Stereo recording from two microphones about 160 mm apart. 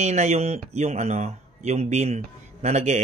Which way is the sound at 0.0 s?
45° right (ahead or behind).